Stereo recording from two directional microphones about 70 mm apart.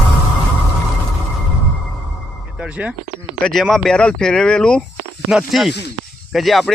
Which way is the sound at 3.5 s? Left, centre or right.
Centre.